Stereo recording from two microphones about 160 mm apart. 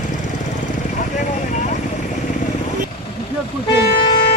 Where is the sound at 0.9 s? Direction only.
50° left (ahead or behind).